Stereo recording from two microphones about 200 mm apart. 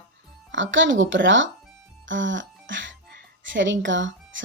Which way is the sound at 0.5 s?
70° right (ahead or behind).